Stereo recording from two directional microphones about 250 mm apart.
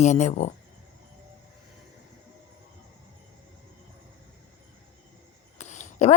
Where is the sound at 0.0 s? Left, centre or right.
Left.